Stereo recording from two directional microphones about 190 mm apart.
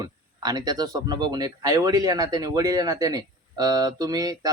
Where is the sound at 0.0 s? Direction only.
20° right (ahead or behind).